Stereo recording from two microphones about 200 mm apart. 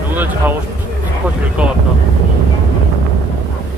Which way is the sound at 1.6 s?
5° right (ahead or behind).